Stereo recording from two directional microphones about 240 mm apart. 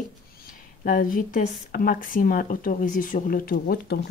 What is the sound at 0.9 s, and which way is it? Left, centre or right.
Speech, left.